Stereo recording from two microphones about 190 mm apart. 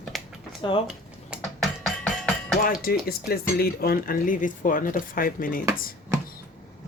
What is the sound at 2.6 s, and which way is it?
Speech, 50° left (ahead or behind).